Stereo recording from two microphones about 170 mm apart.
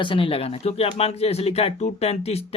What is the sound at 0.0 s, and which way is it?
Speech, 30° left (ahead or behind).